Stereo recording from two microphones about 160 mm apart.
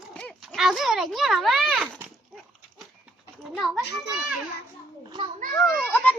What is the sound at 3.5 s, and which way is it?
Speech, centre (ahead or behind).